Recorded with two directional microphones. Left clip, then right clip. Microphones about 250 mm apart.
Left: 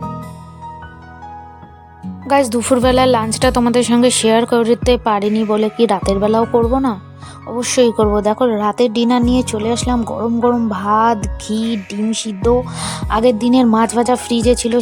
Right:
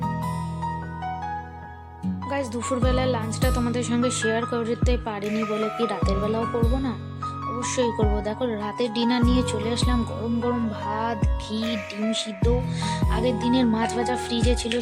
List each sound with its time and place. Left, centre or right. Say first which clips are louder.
2.2 s speech: left 14 dB; left
7.6 s speech: left 12 dB; left